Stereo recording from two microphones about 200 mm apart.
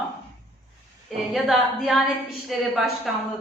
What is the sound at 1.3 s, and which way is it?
A woman's voice, centre (ahead or behind).